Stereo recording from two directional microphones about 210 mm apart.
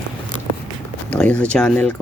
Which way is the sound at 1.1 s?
5° left (ahead or behind).